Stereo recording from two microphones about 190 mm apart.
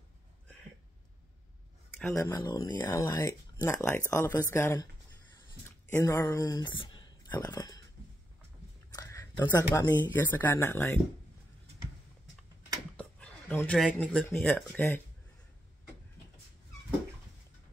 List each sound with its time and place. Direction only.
2.0 s speech: 10° left (ahead or behind)
5.9 s speech: 15° left (ahead or behind)
8.9 s speech: 15° left (ahead or behind)
12.9 s speech: 5° left (ahead or behind)